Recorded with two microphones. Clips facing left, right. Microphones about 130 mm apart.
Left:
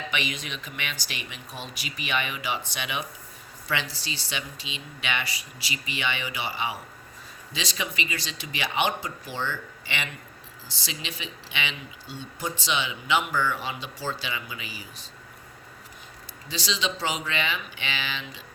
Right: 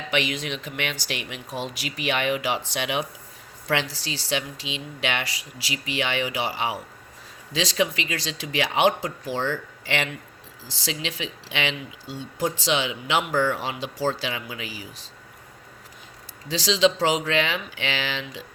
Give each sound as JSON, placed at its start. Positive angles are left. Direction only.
{"t": 0.1, "sound": "speech", "side_deg": -90}
{"t": 16.5, "sound": "speech", "side_deg": -90}